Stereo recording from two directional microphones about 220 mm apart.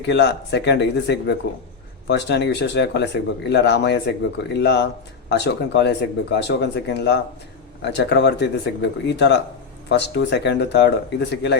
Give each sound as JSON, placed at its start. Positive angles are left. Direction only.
{"t": 0.0, "sound": "speech", "side_deg": 50}